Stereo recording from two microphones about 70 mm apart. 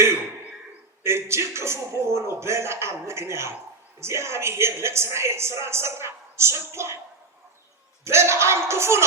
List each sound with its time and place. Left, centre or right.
1.0 s a woman's voice: right
8.0 s a woman's voice: right